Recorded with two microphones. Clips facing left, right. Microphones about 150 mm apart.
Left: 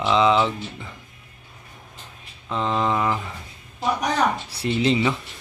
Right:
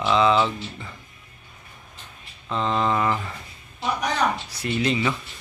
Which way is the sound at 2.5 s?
15° left (ahead or behind).